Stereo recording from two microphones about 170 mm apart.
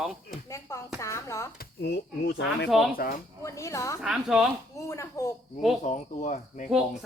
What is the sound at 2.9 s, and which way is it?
Speech, 60° left (ahead or behind).